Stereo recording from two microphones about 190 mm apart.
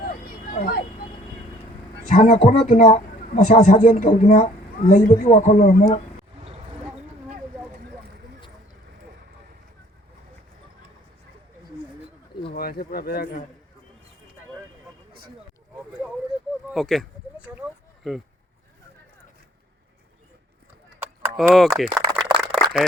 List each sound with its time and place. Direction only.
0.5 s speech: 45° left (ahead or behind)
2.0 s speech: 40° left (ahead or behind)
12.5 s speech: 55° left (ahead or behind)
16.7 s a sound: centre (ahead or behind)
18.0 s speech: centre (ahead or behind)
21.5 s speech: centre (ahead or behind)
21.9 s a sound: centre (ahead or behind)